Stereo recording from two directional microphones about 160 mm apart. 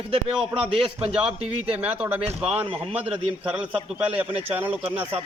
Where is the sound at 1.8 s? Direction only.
10° right (ahead or behind).